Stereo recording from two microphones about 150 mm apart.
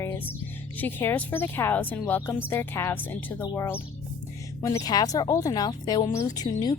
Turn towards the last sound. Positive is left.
turn(degrees=25)  # may be behind; listen again after turning